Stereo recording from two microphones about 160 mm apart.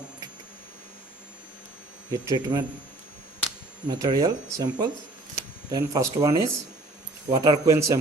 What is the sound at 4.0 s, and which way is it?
Speech, 20° right (ahead or behind).